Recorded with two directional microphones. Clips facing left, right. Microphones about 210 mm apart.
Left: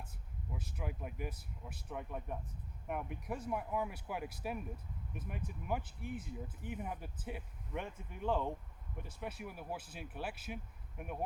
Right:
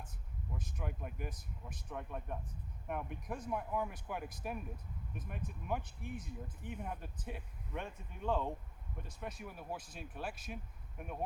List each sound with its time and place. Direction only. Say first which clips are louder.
0.5 s speech: left 1 dB; 5° left (ahead or behind)